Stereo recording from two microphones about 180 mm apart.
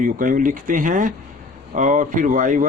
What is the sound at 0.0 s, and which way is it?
Speech, 50° right (ahead or behind).